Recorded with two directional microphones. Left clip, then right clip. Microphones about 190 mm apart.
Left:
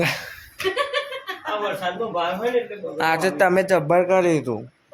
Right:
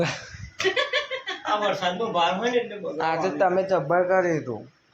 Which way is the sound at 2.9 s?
20° left (ahead or behind).